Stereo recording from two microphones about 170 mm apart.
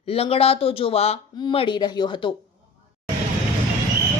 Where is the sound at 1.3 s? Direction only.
25° left (ahead or behind).